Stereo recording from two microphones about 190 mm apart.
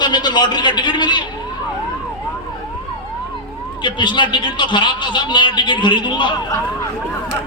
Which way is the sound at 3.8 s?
25° left (ahead or behind).